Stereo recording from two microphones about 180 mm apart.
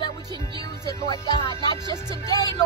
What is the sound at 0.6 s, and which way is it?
Speech, 20° left (ahead or behind).